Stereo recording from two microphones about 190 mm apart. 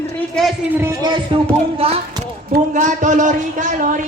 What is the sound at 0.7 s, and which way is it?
Music, 15° right (ahead or behind).